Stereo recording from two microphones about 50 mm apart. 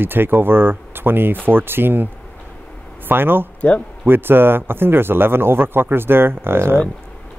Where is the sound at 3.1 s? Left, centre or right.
Right.